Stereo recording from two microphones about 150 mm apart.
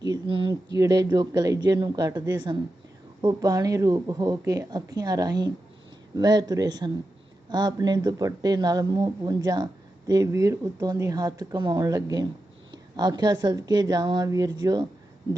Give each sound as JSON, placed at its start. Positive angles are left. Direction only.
{"t": 0.0, "sound": "speech", "side_deg": -30}